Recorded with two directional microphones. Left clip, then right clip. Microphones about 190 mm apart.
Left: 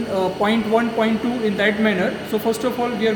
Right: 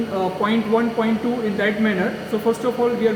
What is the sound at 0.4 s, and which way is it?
A man's voice, 80° left.